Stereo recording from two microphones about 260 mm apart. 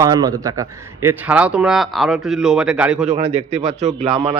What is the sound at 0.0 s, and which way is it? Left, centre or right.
A man's voice, centre.